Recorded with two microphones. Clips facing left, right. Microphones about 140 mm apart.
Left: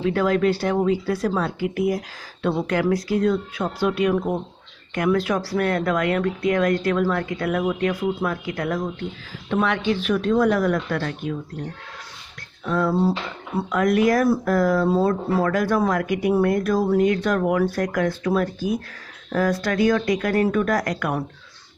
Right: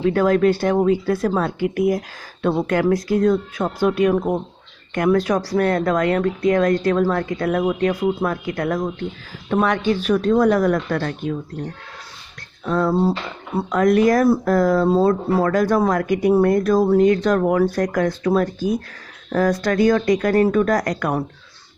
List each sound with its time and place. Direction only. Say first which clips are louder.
0.1 s speech: right 3 dB; 45° right (ahead or behind)
12.6 s speech: right 2 dB; 40° right (ahead or behind)